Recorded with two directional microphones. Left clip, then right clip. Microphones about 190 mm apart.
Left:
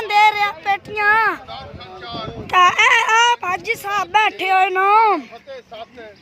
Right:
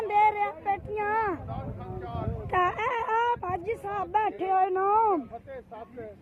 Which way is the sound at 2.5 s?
15° left (ahead or behind).